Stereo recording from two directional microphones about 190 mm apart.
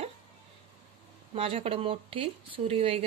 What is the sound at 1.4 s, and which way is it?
Speech, 30° right (ahead or behind).